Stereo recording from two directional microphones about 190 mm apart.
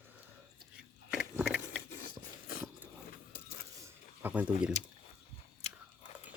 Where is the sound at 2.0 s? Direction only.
50° left (ahead or behind).